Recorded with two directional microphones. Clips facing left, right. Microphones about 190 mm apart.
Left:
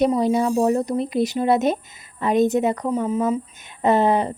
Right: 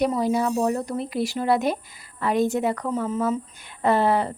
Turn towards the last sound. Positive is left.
turn(degrees=20)  # may be behind; listen again after turning